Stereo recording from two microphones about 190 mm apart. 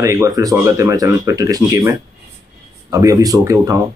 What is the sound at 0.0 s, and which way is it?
Speech, 15° right (ahead or behind).